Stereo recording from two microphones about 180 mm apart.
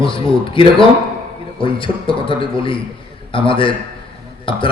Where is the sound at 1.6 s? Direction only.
30° left (ahead or behind).